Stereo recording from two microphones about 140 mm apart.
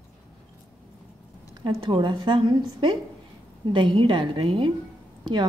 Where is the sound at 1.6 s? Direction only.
35° right (ahead or behind).